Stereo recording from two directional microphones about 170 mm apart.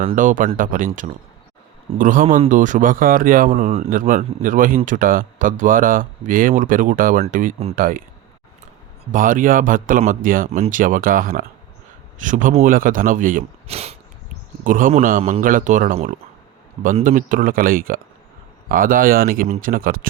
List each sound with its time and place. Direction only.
0.2 s speech: 50° right (ahead or behind)
9.1 s speech: 50° right (ahead or behind)
13.7 s speech: 35° right (ahead or behind)
14.6 s speech: 50° right (ahead or behind)